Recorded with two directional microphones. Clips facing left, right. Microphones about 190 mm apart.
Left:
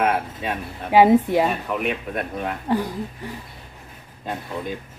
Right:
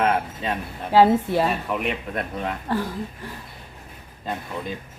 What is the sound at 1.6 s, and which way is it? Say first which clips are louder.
Speech: left 1 dB; 5° left (ahead or behind).